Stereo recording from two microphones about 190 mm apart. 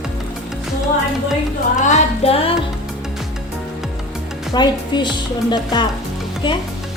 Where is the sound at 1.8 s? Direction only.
30° left (ahead or behind).